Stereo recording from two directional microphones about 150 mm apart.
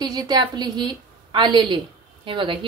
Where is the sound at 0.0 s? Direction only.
25° right (ahead or behind).